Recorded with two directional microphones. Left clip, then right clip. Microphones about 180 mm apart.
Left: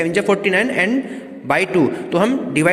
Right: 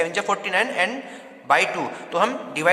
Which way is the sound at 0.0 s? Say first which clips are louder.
Left 6 dB; 15° left (ahead or behind).